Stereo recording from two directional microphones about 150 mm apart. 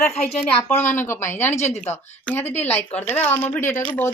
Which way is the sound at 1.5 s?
50° left (ahead or behind).